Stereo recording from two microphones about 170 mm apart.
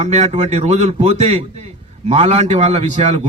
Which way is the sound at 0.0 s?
40° right (ahead or behind).